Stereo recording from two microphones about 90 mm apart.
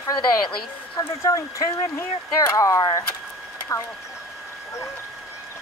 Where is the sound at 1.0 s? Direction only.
40° left (ahead or behind).